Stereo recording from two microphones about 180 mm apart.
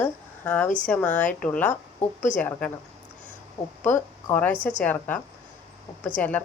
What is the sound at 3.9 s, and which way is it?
A woman's voice, 10° left (ahead or behind).